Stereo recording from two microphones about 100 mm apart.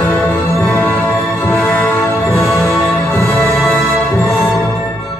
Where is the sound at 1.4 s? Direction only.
15° left (ahead or behind).